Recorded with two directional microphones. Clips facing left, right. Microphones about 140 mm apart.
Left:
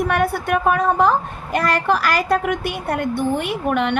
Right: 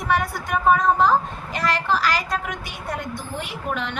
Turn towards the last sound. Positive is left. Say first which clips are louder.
# left 8 dB
turn(degrees=60)  # may be behind; listen again after turning